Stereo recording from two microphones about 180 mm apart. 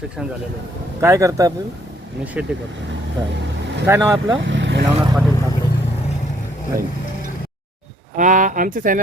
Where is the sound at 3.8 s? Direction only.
15° right (ahead or behind).